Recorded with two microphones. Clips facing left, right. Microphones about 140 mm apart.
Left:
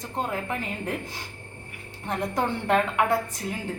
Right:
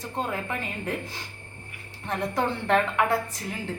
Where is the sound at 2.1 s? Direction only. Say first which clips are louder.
Even; 20° left (ahead or behind).